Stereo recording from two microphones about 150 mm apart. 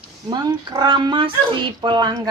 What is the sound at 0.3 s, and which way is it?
Speech, 25° right (ahead or behind).